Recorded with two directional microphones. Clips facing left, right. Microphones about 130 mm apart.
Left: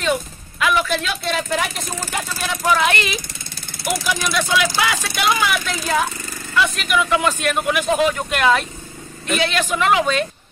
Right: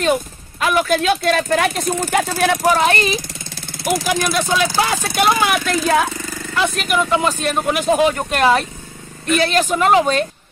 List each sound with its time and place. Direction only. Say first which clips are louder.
0.6 s speech: right 3 dB; 45° right (ahead or behind); by 2.6 s 60° right (ahead or behind)
2.6 s speech: left 1 dB; 40° right (ahead or behind)
4.5 s speech: right 2 dB; 35° right (ahead or behind); by 6.0 s 50° right (ahead or behind)
6.5 s speech: right 1 dB; 40° right (ahead or behind)